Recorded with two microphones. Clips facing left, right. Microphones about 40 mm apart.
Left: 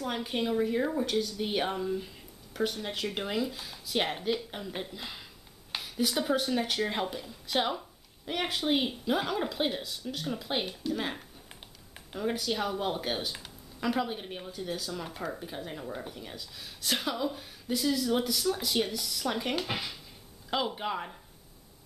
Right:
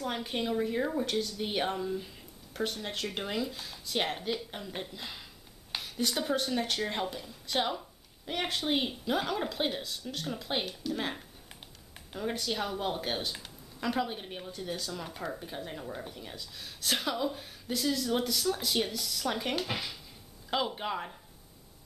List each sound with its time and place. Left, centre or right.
0.0 s a woman's voice: centre
10.6 s speech: centre
10.9 s a woman's voice: centre